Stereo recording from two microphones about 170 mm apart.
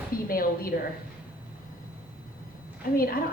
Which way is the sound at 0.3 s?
60° left (ahead or behind).